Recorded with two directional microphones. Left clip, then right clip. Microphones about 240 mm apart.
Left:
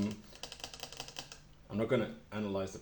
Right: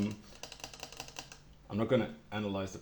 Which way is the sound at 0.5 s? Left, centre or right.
Centre.